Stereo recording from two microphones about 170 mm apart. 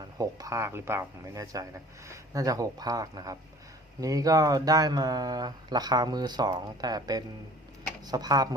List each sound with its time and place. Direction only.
0.2 s speech: 20° right (ahead or behind)